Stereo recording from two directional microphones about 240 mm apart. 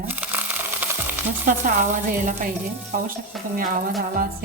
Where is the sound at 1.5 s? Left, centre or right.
Right.